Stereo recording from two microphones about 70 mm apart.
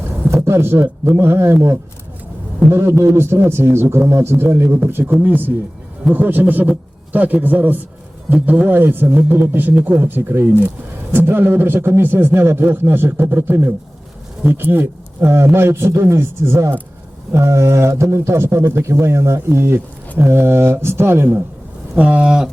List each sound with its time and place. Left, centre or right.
0.4 s a man's voice: right
2.7 s a man's voice: right
21.9 s speech: centre